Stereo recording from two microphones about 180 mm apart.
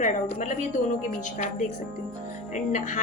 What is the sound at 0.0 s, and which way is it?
A woman's voice, 45° left (ahead or behind).